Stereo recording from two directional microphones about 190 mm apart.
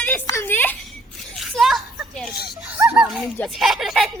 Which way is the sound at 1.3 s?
Centre (ahead or behind).